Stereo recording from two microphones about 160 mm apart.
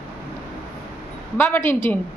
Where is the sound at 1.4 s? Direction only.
15° left (ahead or behind).